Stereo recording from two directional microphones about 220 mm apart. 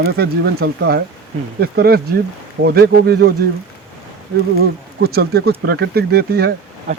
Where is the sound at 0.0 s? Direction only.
45° right (ahead or behind).